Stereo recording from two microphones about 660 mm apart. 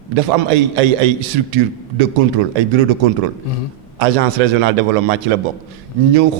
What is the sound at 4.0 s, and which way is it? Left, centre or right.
A man's voice, right.